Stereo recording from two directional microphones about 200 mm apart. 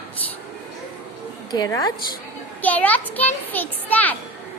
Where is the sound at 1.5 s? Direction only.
20° left (ahead or behind).